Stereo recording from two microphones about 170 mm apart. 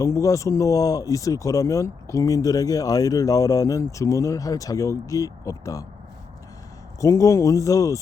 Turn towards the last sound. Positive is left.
turn(degrees=20)  # may be behind; listen again after turning